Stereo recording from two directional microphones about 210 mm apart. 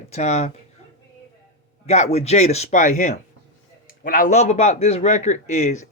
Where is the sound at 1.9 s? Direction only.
30° left (ahead or behind).